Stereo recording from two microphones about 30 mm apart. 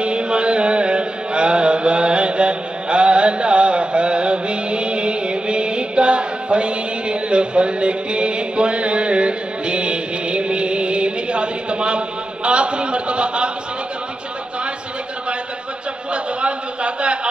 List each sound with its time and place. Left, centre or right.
0.0 s chant: right
12.4 s a sound: right
16.1 s a man's voice: right